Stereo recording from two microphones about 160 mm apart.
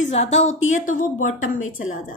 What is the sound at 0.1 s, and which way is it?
A woman's voice, 45° left (ahead or behind).